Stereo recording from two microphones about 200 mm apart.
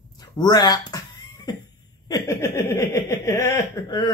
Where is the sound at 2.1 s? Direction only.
15° left (ahead or behind).